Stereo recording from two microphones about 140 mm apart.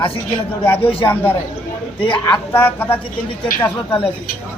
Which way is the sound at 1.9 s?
40° left (ahead or behind).